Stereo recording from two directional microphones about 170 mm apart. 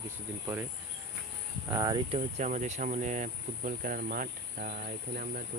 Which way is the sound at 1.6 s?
20° right (ahead or behind).